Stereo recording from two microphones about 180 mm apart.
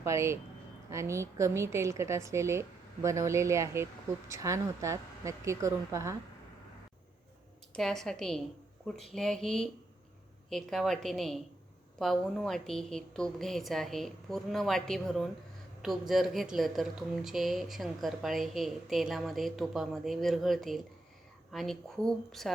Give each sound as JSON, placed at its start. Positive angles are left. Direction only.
{"t": 0.0, "sound": "a woman's voice", "side_deg": -15}
{"t": 7.8, "sound": "speech", "side_deg": 0}